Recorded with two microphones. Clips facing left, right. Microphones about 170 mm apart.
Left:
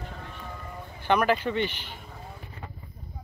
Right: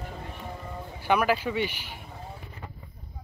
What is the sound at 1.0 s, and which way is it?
Speech, 10° right (ahead or behind).